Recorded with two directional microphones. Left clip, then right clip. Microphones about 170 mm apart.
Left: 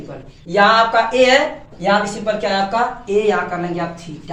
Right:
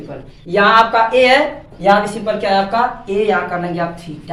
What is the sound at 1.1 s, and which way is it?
Speech, 20° right (ahead or behind).